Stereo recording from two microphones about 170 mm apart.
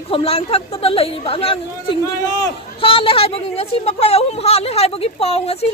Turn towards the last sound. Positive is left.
turn(degrees=35)  # may be behind; listen again after turning